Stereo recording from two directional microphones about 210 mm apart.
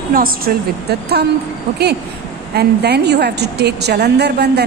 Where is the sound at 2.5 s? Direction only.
50° right (ahead or behind).